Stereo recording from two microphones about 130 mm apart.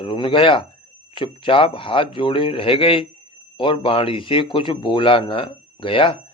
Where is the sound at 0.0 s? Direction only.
40° left (ahead or behind).